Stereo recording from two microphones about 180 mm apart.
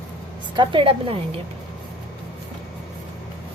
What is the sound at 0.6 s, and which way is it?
Speech, 30° right (ahead or behind).